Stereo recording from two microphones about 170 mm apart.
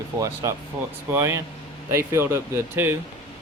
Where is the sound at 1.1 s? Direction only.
15° right (ahead or behind).